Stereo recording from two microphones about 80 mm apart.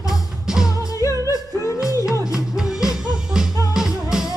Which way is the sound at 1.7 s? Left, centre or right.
Centre.